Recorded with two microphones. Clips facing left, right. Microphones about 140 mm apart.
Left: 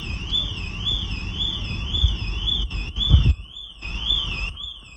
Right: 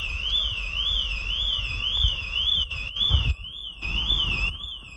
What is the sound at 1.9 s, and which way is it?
Car alarm, 35° left (ahead or behind).